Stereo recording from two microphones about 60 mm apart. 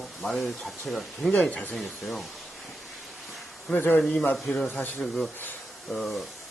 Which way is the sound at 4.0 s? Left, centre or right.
Centre.